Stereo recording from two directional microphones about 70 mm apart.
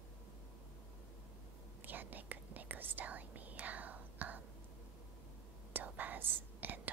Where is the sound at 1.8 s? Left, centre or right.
Right.